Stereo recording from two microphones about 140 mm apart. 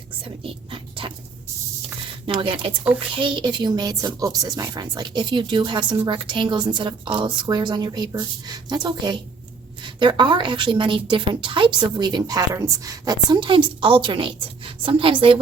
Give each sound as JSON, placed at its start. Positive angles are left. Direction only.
{"t": 0.4, "sound": "whispering", "side_deg": -40}
{"t": 2.2, "sound": "a woman's voice", "side_deg": -35}